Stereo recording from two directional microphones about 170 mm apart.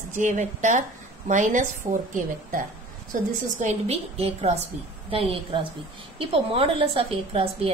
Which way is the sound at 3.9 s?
35° right (ahead or behind).